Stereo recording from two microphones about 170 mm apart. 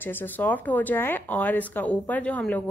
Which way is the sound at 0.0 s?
10° left (ahead or behind).